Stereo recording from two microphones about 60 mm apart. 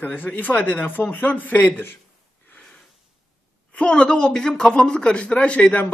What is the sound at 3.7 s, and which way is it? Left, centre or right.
A man's voice, centre.